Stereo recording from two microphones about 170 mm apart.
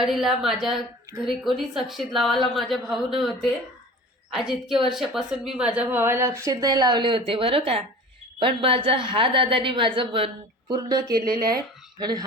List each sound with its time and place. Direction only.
0.0 s a woman's voice: centre (ahead or behind); by 12.2 s 25° right (ahead or behind)